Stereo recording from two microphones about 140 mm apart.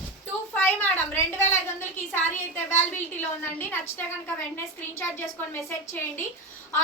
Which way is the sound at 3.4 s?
15° left (ahead or behind).